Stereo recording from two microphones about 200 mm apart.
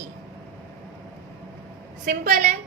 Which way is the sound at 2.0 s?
45° right (ahead or behind).